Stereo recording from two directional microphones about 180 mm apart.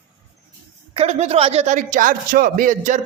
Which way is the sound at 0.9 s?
35° right (ahead or behind).